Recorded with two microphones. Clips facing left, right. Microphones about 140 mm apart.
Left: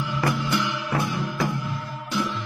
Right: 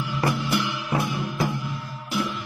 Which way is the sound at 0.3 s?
10° right (ahead or behind).